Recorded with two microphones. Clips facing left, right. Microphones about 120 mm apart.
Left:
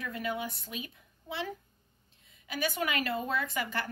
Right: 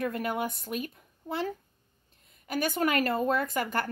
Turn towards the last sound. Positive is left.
turn(degrees=-45)  # may be behind; listen again after turning